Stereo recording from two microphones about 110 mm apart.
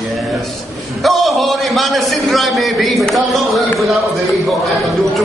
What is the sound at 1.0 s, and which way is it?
Speech, centre (ahead or behind).